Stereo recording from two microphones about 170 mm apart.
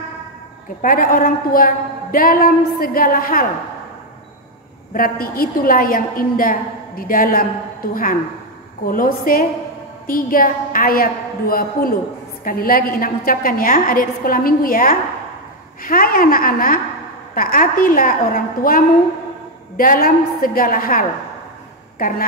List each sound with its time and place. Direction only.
0.8 s a woman's voice: 55° left (ahead or behind)
4.9 s a woman's voice: 60° left (ahead or behind)